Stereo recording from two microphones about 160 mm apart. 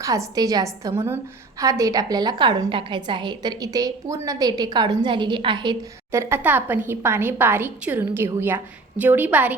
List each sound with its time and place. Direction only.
0.0 s a woman's voice: 20° right (ahead or behind)
6.1 s a woman's voice: 15° right (ahead or behind)